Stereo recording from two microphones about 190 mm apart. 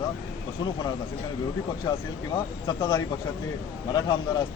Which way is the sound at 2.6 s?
20° left (ahead or behind).